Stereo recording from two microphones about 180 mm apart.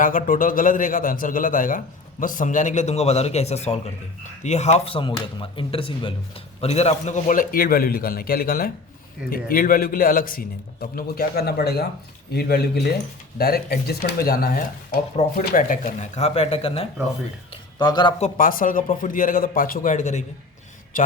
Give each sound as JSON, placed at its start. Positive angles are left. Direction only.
{"t": 0.0, "sound": "a man's voice", "side_deg": 50}
{"t": 18.2, "sound": "a man's voice", "side_deg": 50}